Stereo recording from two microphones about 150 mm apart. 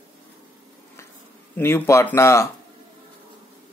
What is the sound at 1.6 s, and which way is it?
Speech, 15° left (ahead or behind).